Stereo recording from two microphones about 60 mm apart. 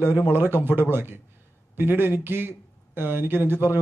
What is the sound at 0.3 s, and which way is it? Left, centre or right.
Speech, right.